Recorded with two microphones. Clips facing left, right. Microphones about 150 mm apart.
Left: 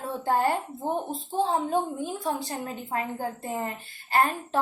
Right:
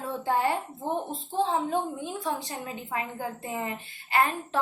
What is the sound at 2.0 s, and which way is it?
A woman's voice, 45° left (ahead or behind).